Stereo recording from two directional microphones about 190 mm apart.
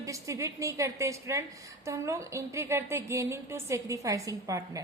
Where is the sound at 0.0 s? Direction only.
15° right (ahead or behind).